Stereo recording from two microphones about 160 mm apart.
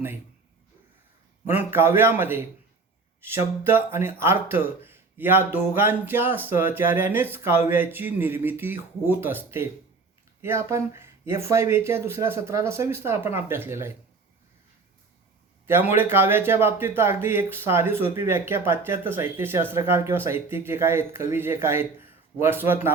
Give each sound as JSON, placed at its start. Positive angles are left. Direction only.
{"t": 1.5, "sound": "speech", "side_deg": -15}
{"t": 10.4, "sound": "speech", "side_deg": -15}
{"t": 15.6, "sound": "speech", "side_deg": -15}